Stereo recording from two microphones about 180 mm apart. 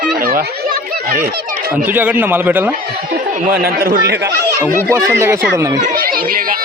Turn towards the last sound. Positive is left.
turn(degrees=-55)  # may be behind; listen again after turning